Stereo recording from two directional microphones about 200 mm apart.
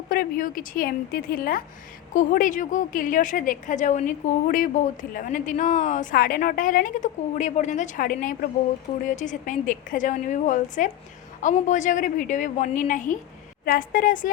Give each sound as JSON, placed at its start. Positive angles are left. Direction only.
{"t": 0.1, "sound": "a woman's voice", "side_deg": 45}